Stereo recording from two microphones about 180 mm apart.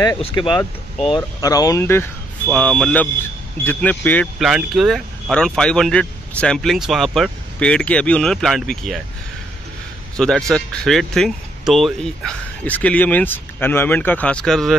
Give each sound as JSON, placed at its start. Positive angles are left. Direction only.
{"t": 0.5, "sound": "speech", "side_deg": 0}
{"t": 1.1, "sound": "speech", "side_deg": 20}
{"t": 4.4, "sound": "speech", "side_deg": 0}
{"t": 10.1, "sound": "a man's voice", "side_deg": 5}